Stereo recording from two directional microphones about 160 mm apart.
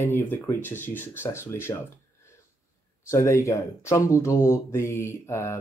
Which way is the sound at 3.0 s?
20° left (ahead or behind).